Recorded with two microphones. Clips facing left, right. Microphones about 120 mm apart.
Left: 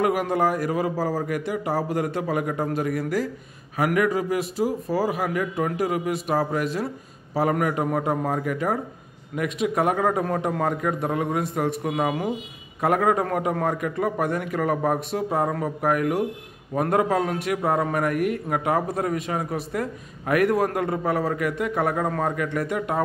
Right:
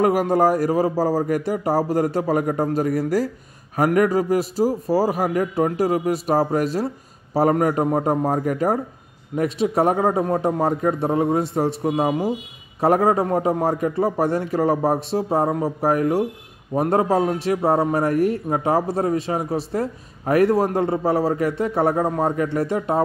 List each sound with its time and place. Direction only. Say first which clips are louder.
0.0 s a man's voice: right 5 dB; 35° right (ahead or behind)